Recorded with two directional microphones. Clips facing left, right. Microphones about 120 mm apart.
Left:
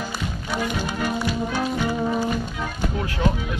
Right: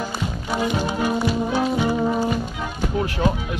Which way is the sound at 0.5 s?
25° right (ahead or behind).